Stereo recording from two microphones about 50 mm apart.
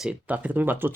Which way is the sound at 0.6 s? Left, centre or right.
Right.